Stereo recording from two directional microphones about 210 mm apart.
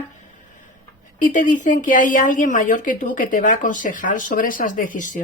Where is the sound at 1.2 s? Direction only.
35° left (ahead or behind).